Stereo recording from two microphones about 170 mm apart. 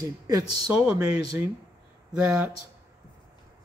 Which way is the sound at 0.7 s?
5° right (ahead or behind).